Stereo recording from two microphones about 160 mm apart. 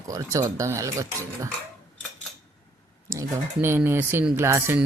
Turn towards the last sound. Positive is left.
turn(degrees=-15)  # may be behind; listen again after turning